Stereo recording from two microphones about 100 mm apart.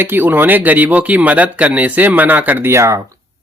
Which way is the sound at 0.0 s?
20° right (ahead or behind).